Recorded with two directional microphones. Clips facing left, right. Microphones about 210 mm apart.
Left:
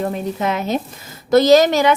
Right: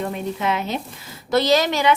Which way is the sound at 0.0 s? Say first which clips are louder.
Left 3 dB; 40° left (ahead or behind).